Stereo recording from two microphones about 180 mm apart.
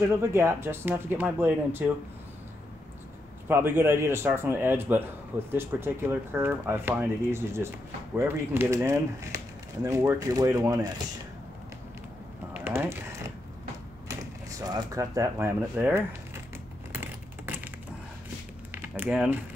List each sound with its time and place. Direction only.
0.3 s speech: 15° right (ahead or behind)
3.4 s speech: 10° right (ahead or behind)
12.5 s a sound: 10° right (ahead or behind)
14.6 s speech: 20° right (ahead or behind)
16.9 s a sound: 10° right (ahead or behind)
18.7 s typing: 10° right (ahead or behind)